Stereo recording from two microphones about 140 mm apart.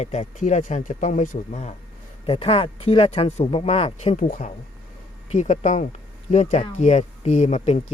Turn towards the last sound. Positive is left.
turn(degrees=50)  # may be behind; listen again after turning